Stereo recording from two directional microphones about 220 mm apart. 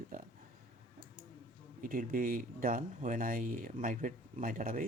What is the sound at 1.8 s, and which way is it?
Speech, 40° right (ahead or behind).